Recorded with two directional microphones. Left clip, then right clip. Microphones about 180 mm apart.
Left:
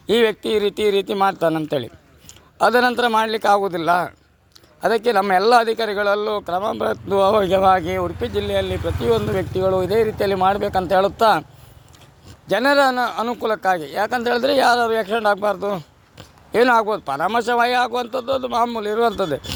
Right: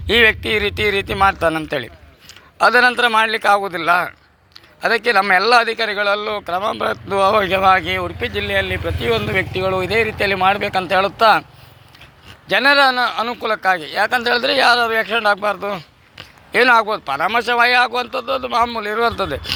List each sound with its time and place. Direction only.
0.1 s a man's voice: 50° left (ahead or behind); by 4.1 s 65° left (ahead or behind)
4.8 s a man's voice: 55° left (ahead or behind)
12.5 s a man's voice: 55° left (ahead or behind)